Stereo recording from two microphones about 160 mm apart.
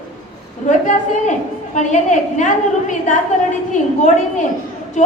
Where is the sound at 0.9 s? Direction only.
50° left (ahead or behind).